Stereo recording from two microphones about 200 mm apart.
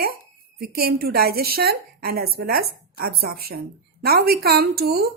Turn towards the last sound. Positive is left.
turn(degrees=-50)  # may be behind; listen again after turning